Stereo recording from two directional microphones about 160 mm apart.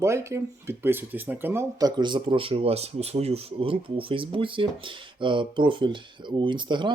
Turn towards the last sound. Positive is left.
turn(degrees=-30)  # may be behind; listen again after turning